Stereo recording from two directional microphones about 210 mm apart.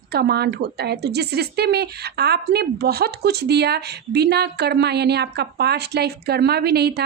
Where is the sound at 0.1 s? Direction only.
50° right (ahead or behind).